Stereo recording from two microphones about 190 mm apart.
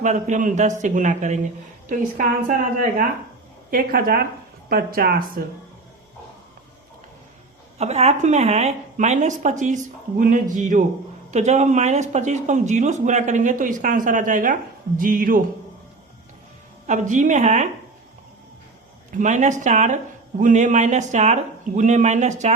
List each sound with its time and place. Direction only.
0.0 s a woman's voice: 40° right (ahead or behind)
3.7 s a woman's voice: 50° right (ahead or behind)
7.8 s speech: 35° right (ahead or behind)
16.8 s speech: 40° right (ahead or behind)
19.1 s speech: 40° right (ahead or behind)